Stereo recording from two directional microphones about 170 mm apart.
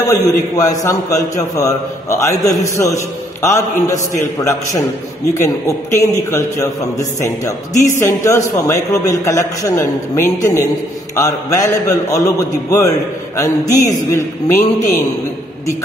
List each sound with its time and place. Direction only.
0.0 s a man's voice: 20° left (ahead or behind)
5.9 s a man's voice: 20° left (ahead or behind)